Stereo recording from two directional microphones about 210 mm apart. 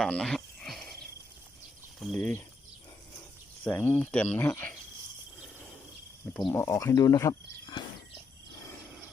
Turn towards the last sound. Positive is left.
turn(degrees=20)  # may be behind; listen again after turning